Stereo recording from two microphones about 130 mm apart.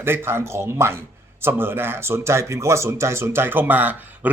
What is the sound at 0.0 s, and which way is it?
A man's voice, 15° right (ahead or behind).